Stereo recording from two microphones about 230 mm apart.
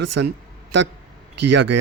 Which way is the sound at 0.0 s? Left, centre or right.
Right.